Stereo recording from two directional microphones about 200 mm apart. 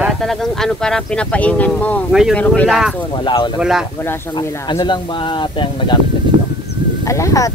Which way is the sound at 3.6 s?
5° right (ahead or behind).